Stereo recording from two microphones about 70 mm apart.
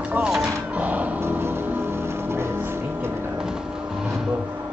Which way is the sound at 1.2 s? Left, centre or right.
Right.